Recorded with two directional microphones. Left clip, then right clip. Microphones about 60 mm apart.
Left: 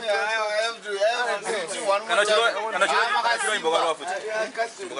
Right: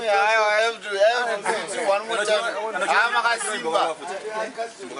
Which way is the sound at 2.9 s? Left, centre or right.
Centre.